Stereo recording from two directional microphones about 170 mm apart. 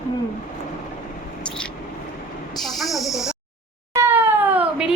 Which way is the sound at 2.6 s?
Centre (ahead or behind).